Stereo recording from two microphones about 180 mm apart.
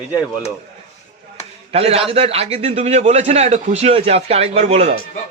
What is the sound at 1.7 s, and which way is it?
A man's voice, 35° right (ahead or behind).